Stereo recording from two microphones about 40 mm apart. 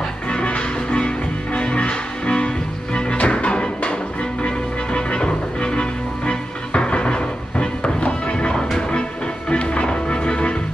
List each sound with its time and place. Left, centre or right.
0.3 s music: left
4.9 s music: left